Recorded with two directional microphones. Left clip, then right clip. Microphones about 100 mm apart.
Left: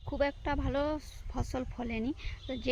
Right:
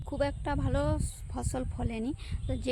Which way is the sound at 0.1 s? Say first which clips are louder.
Even; 25° right (ahead or behind).